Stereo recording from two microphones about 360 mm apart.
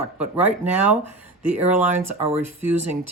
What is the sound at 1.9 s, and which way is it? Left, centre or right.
Speech, centre.